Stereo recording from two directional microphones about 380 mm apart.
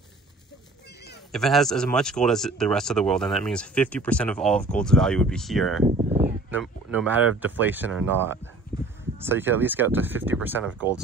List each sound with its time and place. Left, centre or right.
1.3 s speech: centre
5.9 s speech: centre
6.2 s speech: centre